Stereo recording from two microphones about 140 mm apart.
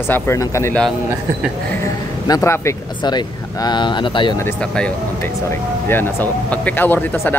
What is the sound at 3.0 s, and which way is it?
Speech, 30° left (ahead or behind).